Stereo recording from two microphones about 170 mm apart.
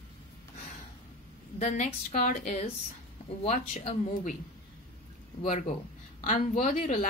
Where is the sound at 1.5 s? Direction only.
45° left (ahead or behind).